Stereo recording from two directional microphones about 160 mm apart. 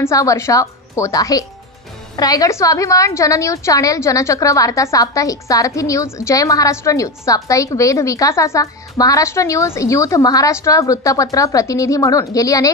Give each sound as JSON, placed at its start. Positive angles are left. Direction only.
{"t": 0.0, "sound": "a woman's voice", "side_deg": 20}